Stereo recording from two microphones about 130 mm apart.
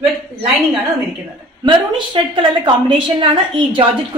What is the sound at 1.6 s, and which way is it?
A woman's voice, 40° right (ahead or behind).